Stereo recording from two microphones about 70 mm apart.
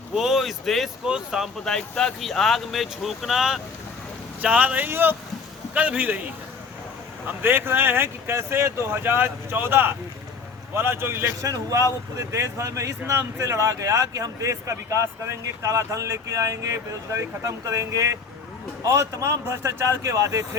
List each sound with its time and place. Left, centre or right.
0.1 s speech: centre
1.0 s speech: centre
1.5 s speech: centre
4.4 s speech: right
7.4 s speech: right
11.4 s speech: right